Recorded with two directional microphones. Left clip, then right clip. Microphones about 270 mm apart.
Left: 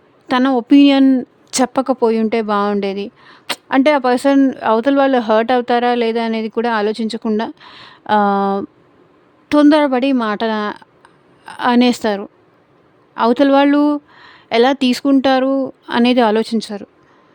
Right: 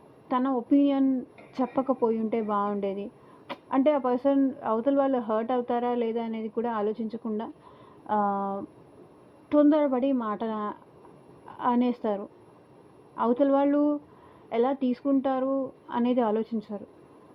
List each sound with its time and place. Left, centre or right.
0.3 s speech: left